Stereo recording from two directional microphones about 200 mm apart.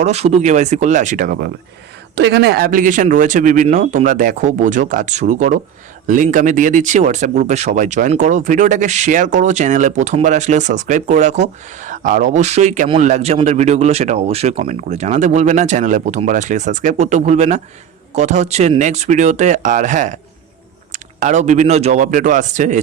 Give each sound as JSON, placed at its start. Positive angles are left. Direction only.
{"t": 0.0, "sound": "speech", "side_deg": -30}